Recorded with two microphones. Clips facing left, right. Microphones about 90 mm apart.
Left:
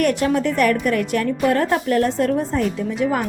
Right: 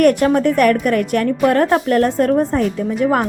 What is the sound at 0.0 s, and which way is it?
A woman's voice, 50° right (ahead or behind).